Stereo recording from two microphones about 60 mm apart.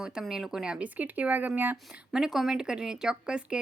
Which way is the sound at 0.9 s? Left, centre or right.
Right.